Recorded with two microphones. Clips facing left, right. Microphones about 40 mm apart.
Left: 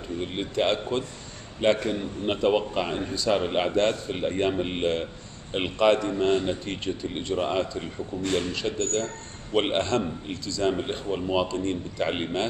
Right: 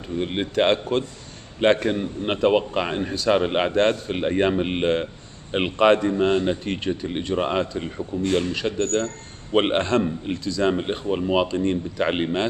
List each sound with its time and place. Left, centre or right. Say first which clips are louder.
0.2 s a man's voice: right 5 dB; right